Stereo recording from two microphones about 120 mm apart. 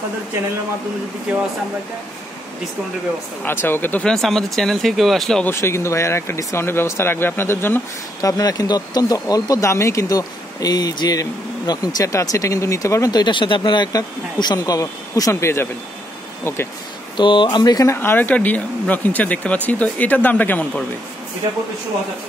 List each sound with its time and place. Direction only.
3.4 s speech: 15° left (ahead or behind)
4.1 s speech: 5° left (ahead or behind)
5.4 s speech: 20° left (ahead or behind)
8.2 s speech: 30° left (ahead or behind)
17.2 s speech: 40° left (ahead or behind)
17.9 s speech: 15° left (ahead or behind)